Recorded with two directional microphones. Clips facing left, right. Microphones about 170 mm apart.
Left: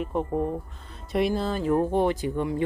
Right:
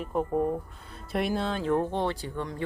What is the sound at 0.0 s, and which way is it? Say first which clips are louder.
Speech: even; centre (ahead or behind).